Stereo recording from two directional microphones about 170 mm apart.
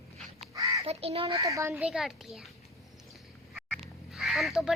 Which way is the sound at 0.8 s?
35° right (ahead or behind).